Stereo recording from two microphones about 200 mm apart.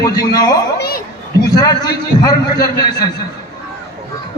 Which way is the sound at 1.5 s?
20° left (ahead or behind).